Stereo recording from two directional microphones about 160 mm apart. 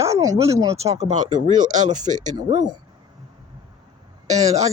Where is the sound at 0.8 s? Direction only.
40° right (ahead or behind).